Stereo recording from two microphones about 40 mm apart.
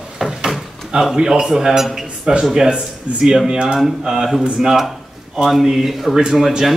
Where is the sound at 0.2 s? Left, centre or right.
Centre.